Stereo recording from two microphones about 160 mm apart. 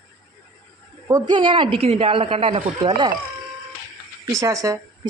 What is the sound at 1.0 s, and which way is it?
A woman's voice, 25° right (ahead or behind).